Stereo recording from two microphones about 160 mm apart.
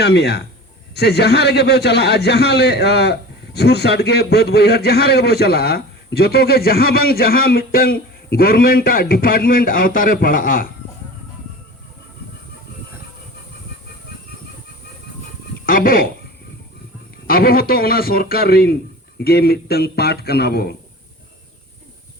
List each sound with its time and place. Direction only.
0.0 s a man's voice: 90° left; by 10.7 s 60° left (ahead or behind)
15.6 s speech: 60° left (ahead or behind)
17.2 s a man's voice: 70° left (ahead or behind); by 20.7 s 90° left